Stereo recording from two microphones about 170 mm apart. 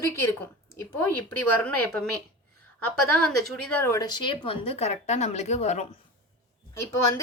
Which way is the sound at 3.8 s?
15° left (ahead or behind).